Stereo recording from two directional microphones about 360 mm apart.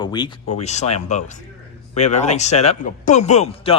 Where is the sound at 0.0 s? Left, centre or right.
Centre.